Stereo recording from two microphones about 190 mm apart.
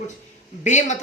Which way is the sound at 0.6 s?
40° left (ahead or behind).